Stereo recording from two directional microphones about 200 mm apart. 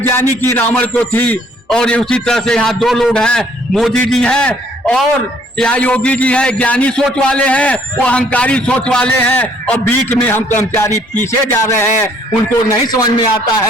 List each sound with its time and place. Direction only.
0.0 s a man's voice: 10° left (ahead or behind)
12.9 s a man's voice: 20° left (ahead or behind)